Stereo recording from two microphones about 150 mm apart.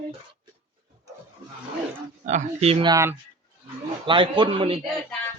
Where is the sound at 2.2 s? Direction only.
50° right (ahead or behind).